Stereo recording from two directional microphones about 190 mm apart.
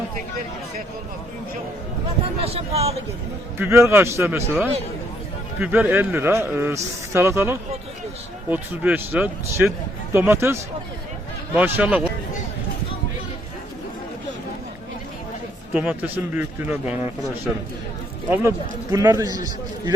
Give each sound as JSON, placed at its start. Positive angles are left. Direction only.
{"t": 2.4, "sound": "speech", "side_deg": -30}
{"t": 3.6, "sound": "speech", "side_deg": -15}
{"t": 15.7, "sound": "speech", "side_deg": -10}